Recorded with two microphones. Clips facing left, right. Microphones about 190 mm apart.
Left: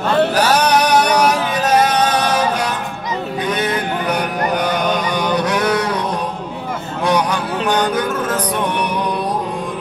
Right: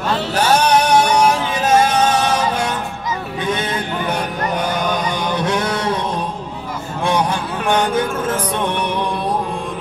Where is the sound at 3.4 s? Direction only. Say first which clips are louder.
Left 1 dB; 25° right (ahead or behind).